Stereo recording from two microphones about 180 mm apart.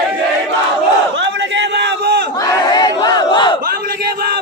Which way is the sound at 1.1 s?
80° right.